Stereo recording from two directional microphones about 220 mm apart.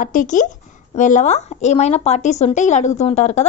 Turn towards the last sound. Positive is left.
turn(degrees=30)  # may be behind; listen again after turning